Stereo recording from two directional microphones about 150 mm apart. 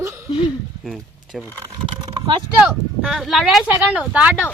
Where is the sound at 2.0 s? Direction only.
30° right (ahead or behind).